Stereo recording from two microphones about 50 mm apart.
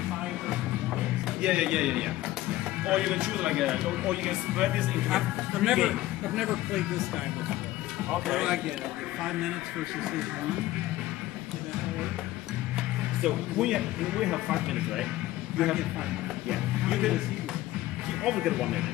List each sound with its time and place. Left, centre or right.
1.4 s speech: centre
8.3 s speech: centre
13.2 s a man's voice: centre
18.2 s speech: centre